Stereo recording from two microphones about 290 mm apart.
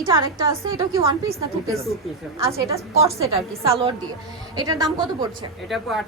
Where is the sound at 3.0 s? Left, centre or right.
Right.